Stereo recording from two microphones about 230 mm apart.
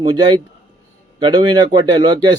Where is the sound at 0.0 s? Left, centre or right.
Centre.